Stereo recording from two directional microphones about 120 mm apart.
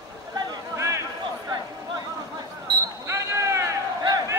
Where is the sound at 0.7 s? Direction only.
25° right (ahead or behind).